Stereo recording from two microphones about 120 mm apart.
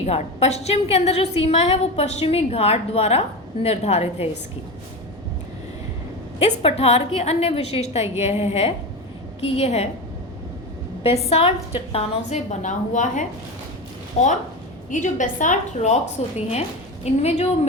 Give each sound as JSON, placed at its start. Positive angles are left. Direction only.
{"t": 0.0, "sound": "a woman's voice", "side_deg": 60}
{"t": 6.4, "sound": "a woman's voice", "side_deg": 55}
{"t": 11.0, "sound": "a woman's voice", "side_deg": 60}
{"t": 14.2, "sound": "a woman's voice", "side_deg": 70}
{"t": 14.8, "sound": "a woman's voice", "side_deg": 90}
{"t": 16.5, "sound": "a woman's voice", "side_deg": 60}